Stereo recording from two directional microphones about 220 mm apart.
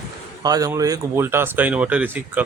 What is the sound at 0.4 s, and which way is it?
Speech, 15° right (ahead or behind).